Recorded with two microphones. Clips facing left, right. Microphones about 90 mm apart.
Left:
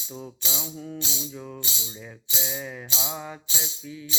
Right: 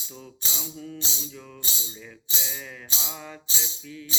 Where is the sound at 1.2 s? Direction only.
20° left (ahead or behind).